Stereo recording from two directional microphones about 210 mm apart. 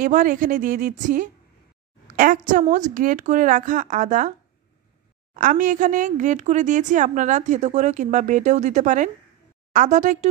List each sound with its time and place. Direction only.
0.0 s speech: 40° right (ahead or behind)
5.3 s speech: 40° right (ahead or behind)